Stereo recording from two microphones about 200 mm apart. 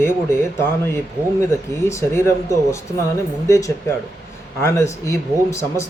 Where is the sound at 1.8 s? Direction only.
15° left (ahead or behind).